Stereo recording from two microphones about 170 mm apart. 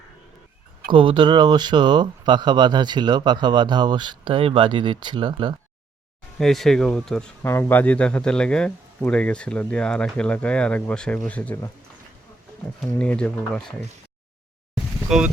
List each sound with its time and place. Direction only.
0.9 s speech: 30° right (ahead or behind)
6.4 s a man's voice: centre (ahead or behind)
12.8 s speech: 5° left (ahead or behind)
14.8 s a sound: 5° right (ahead or behind)